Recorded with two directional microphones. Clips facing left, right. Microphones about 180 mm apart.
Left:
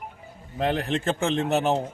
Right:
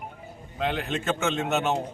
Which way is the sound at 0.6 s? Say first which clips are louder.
Left 3 dB; 35° left (ahead or behind).